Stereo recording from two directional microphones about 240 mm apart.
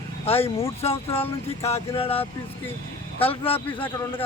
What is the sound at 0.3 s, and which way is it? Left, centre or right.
Speech, left.